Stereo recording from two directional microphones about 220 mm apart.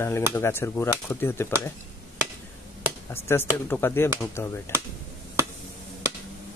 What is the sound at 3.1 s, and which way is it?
Speech, 10° left (ahead or behind).